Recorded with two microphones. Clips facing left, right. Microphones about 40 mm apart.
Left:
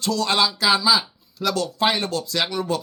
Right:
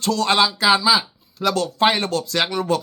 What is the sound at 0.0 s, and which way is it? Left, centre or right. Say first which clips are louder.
Speech: right 3 dB; right.